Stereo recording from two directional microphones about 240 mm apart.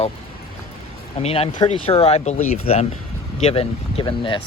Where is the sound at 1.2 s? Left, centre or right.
Left.